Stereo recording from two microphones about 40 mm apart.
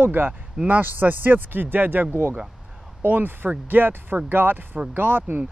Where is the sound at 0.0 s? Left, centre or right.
Right.